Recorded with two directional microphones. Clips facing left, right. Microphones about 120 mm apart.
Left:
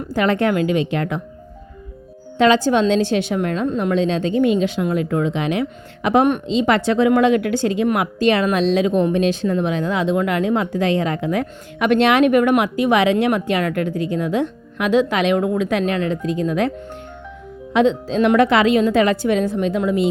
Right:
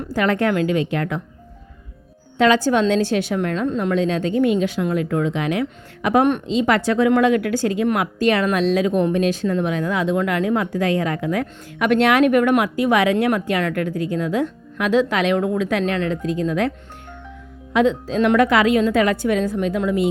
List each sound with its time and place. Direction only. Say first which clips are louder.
0.1 s speech: left 1 dB; 20° left (ahead or behind)
2.4 s speech: left 1 dB; 25° left (ahead or behind)
17.7 s speech: left 1 dB; 25° left (ahead or behind)